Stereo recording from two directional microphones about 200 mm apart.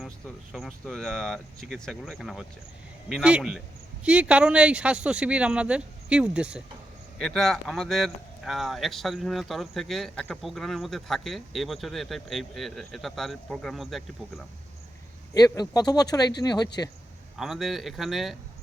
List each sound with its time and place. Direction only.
0.5 s speech: centre (ahead or behind)
15.4 s speech: 20° left (ahead or behind)
17.3 s speech: centre (ahead or behind)